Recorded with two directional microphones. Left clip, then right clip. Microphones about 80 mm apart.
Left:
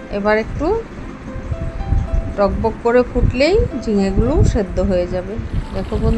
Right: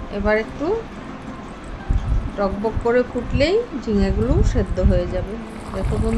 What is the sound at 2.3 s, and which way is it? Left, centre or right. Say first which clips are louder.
Speech: left 5 dB; left.